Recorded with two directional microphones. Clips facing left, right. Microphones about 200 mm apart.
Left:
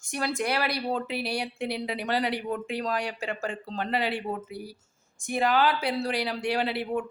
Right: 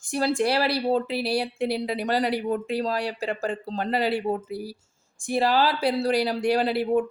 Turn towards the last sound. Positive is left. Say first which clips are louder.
# right 6 dB
turn(degrees=-40)  # may be behind; listen again after turning